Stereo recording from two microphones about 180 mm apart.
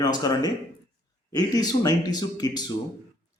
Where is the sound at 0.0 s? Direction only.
20° left (ahead or behind).